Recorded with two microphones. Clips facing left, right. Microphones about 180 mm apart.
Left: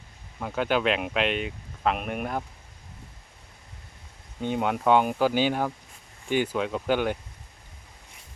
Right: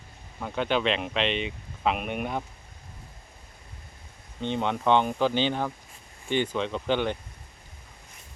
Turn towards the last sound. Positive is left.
turn(degrees=5)  # may be behind; listen again after turning